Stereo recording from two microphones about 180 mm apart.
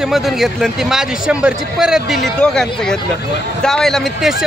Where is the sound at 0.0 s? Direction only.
Centre (ahead or behind).